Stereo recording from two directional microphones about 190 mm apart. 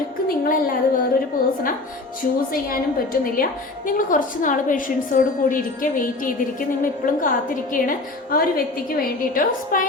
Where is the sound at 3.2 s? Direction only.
45° left (ahead or behind).